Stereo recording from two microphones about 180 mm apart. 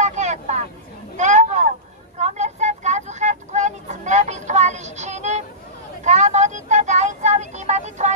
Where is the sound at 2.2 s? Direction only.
40° right (ahead or behind).